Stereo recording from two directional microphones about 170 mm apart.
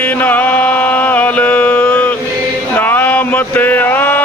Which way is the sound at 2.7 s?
10° left (ahead or behind).